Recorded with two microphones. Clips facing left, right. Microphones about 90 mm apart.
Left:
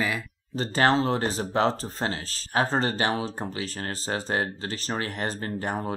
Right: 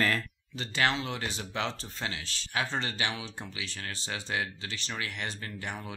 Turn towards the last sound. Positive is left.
turn(degrees=40)  # may be behind; listen again after turning